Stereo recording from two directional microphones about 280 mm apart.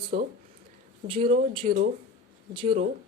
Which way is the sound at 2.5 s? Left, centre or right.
Centre.